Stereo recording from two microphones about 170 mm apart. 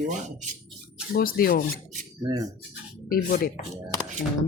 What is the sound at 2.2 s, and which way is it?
Speech, 20° right (ahead or behind).